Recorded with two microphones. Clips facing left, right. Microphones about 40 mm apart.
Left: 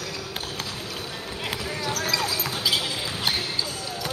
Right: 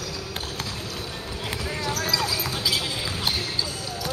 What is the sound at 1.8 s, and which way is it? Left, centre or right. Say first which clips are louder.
Basketball bounce: even; centre.